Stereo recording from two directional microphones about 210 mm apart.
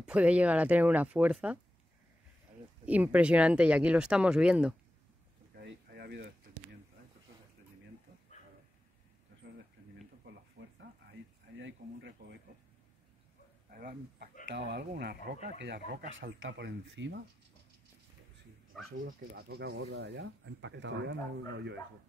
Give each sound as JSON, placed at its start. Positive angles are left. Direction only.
{"t": 0.0, "sound": "speech", "side_deg": -5}
{"t": 2.8, "sound": "speech", "side_deg": -5}
{"t": 5.6, "sound": "a sound", "side_deg": -50}
{"t": 10.6, "sound": "a sound", "side_deg": -50}
{"t": 13.7, "sound": "dog", "side_deg": -45}
{"t": 14.5, "sound": "speech", "side_deg": -55}
{"t": 18.9, "sound": "speech", "side_deg": -45}